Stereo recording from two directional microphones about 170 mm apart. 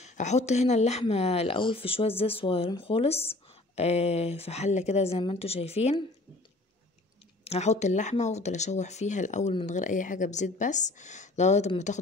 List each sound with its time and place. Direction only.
0.0 s speech: 40° left (ahead or behind)
7.4 s speech: 40° left (ahead or behind)